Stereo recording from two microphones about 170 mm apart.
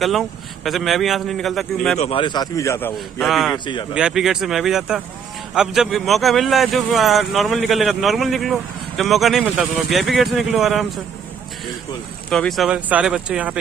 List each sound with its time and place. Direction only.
0.0 s speech: centre (ahead or behind)
2.0 s speech: 35° left (ahead or behind); by 2.9 s 15° left (ahead or behind)
3.2 s speech: centre (ahead or behind)
12.3 s speech: centre (ahead or behind)